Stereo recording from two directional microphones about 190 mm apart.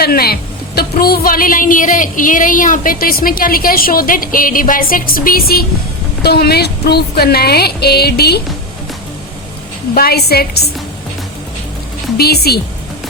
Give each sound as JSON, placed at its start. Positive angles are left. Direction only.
{"t": 0.0, "sound": "a woman's voice", "side_deg": 55}
{"t": 9.9, "sound": "speech", "side_deg": 55}
{"t": 12.1, "sound": "a woman's voice", "side_deg": 55}